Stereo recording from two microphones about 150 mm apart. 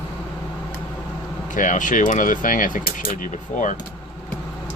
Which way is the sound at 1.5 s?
60° left (ahead or behind).